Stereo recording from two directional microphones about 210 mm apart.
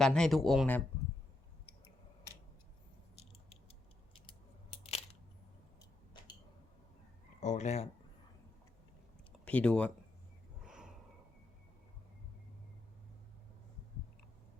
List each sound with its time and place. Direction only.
0.0 s speech: 5° left (ahead or behind)
4.3 s crushing: 25° left (ahead or behind)
7.4 s speech: 35° left (ahead or behind)
9.4 s speech: 5° left (ahead or behind)
10.6 s snort: 5° right (ahead or behind)